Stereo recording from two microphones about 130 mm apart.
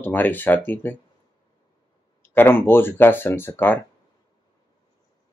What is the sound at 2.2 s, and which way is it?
Speech, 15° left (ahead or behind).